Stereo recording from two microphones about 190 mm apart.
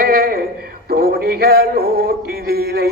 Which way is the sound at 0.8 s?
50° right (ahead or behind).